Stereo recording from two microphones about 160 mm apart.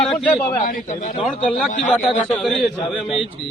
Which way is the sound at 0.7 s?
55° left (ahead or behind).